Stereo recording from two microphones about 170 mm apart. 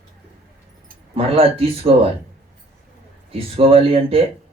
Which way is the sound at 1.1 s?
35° right (ahead or behind).